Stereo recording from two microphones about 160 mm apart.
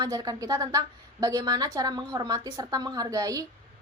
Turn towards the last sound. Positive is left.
turn(degrees=-20)  # may be behind; listen again after turning